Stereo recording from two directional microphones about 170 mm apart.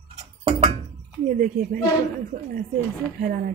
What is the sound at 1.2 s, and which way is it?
Speech, 55° right (ahead or behind).